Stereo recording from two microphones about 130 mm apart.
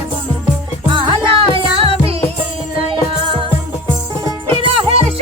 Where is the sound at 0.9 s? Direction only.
40° right (ahead or behind).